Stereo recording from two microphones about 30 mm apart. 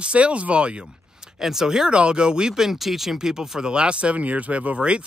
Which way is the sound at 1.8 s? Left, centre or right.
Right.